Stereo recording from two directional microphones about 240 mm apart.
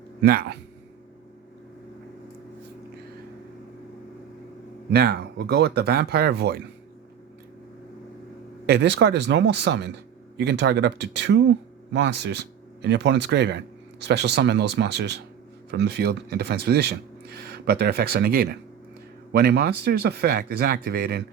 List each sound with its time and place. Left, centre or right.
0.2 s speech: right
4.9 s speech: right
8.6 s speech: right